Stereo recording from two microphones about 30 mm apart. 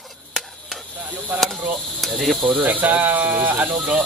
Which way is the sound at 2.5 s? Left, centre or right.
Right.